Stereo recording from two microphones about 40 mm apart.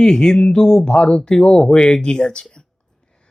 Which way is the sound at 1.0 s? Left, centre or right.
Left.